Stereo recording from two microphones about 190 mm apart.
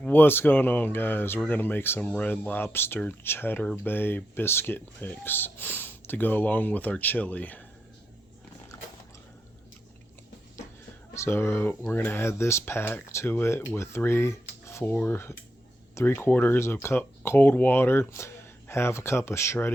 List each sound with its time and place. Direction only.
0.0 s speech: 10° left (ahead or behind)
11.1 s speech: 15° left (ahead or behind)